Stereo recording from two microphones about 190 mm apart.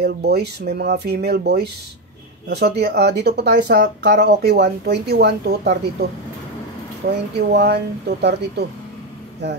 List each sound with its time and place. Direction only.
0.0 s speech: 60° right (ahead or behind)
7.0 s speech: 50° right (ahead or behind)